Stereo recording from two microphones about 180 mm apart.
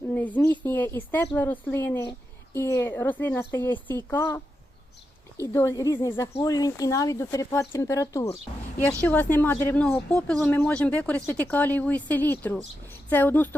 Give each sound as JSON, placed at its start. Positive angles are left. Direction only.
{"t": 0.1, "sound": "speech", "side_deg": 10}